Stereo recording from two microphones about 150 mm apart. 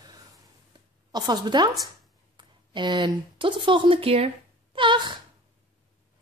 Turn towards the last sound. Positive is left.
turn(degrees=-30)  # may be behind; listen again after turning